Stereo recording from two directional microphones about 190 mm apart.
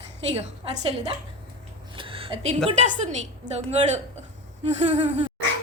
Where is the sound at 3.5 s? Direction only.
40° right (ahead or behind).